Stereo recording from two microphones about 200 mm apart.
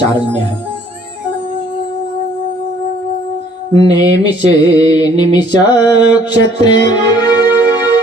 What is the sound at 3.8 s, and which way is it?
Mantra, 20° left (ahead or behind).